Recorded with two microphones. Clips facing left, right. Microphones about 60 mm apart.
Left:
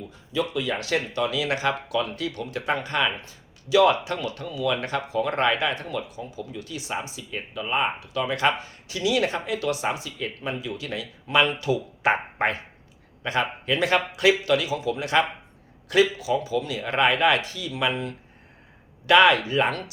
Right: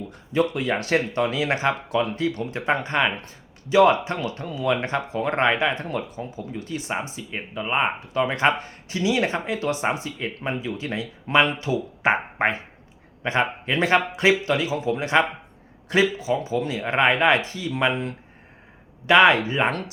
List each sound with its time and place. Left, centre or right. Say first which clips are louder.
0.1 s speech: right 4 dB; right